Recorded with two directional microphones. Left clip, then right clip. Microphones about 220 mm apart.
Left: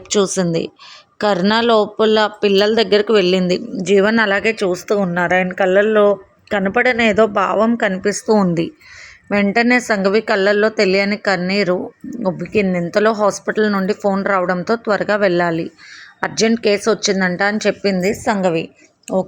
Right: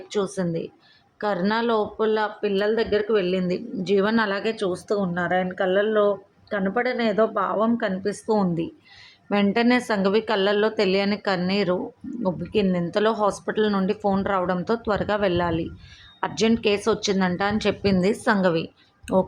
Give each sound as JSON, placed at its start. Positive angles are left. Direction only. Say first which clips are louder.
{"t": 0.1, "sound": "speech", "louder": "left 10 dB", "side_deg": 35}
{"t": 3.8, "sound": "a woman's voice", "louder": "left 8 dB", "side_deg": 20}